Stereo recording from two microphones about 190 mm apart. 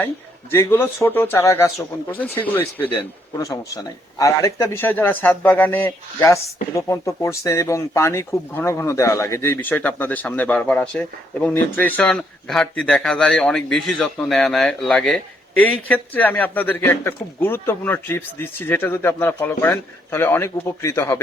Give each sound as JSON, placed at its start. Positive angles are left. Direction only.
{"t": 0.5, "sound": "a man's voice", "side_deg": 15}